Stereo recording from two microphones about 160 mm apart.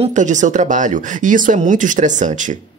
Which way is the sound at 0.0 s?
50° right (ahead or behind).